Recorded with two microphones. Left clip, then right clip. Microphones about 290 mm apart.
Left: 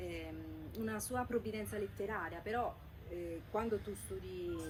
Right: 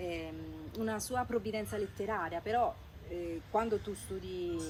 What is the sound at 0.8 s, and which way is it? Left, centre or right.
A woman's voice, centre.